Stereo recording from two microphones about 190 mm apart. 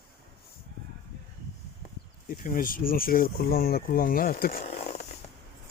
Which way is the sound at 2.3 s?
45° left (ahead or behind).